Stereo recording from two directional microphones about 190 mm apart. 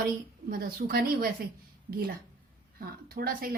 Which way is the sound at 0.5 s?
50° right (ahead or behind).